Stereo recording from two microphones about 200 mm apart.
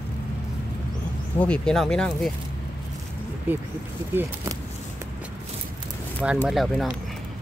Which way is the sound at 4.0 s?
25° left (ahead or behind).